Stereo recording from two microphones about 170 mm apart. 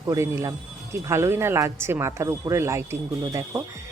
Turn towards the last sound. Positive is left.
turn(degrees=-20)  # may be behind; listen again after turning